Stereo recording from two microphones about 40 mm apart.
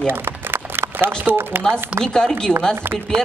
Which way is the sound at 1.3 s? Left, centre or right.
Right.